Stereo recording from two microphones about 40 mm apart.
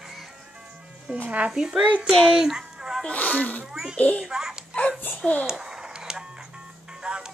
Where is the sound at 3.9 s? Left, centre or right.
Left.